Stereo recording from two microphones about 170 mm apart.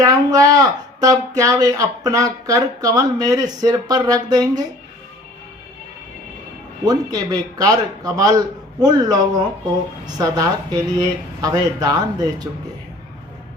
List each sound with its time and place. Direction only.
0.0 s speech: 20° right (ahead or behind)
6.8 s speech: 25° right (ahead or behind)
10.2 s speech: 20° right (ahead or behind)